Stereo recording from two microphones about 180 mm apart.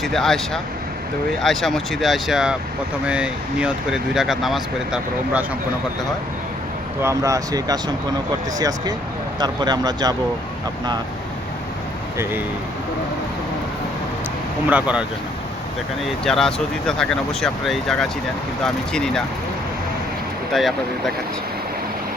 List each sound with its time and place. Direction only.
0.0 s speech: centre (ahead or behind)
7.0 s speech: 15° right (ahead or behind)
12.1 s speech: 15° right (ahead or behind)
14.7 s speech: 5° right (ahead or behind)
16.2 s speech: centre (ahead or behind)
20.5 s speech: centre (ahead or behind)